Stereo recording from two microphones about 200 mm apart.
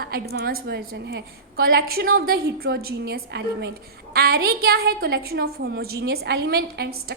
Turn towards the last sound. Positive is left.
turn(degrees=-55)  # may be behind; listen again after turning